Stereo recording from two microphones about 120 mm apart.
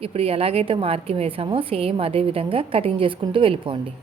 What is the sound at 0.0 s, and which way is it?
A woman's voice, 55° right (ahead or behind).